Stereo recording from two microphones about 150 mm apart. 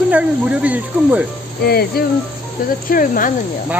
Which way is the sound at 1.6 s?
90° left.